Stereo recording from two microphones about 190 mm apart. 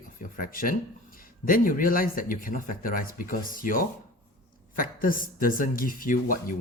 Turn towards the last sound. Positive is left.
turn(degrees=45)  # may be behind; listen again after turning